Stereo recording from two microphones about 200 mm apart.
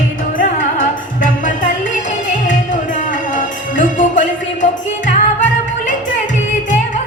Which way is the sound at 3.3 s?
40° left (ahead or behind).